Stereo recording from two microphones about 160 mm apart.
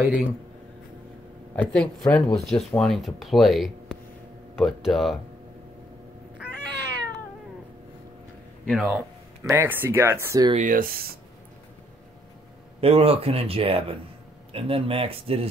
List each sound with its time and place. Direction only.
0.0 s speech: 10° right (ahead or behind)
1.5 s speech: 5° left (ahead or behind)
8.6 s speech: centre (ahead or behind)
9.4 s speech: 15° right (ahead or behind)
10.5 s speech: 55° right (ahead or behind)
12.8 s speech: 35° right (ahead or behind)